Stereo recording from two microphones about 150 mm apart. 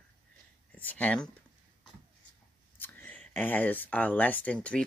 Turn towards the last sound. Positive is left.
turn(degrees=10)  # may be behind; listen again after turning